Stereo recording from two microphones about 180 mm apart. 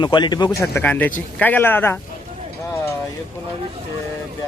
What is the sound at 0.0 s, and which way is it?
Speech, 25° left (ahead or behind).